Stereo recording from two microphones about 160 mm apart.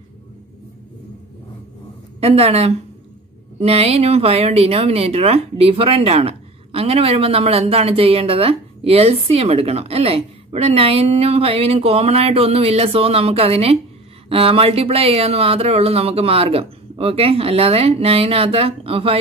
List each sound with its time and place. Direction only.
2.1 s speech: 40° right (ahead or behind)